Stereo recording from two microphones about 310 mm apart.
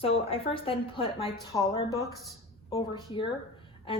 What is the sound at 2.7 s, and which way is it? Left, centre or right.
Speech, centre.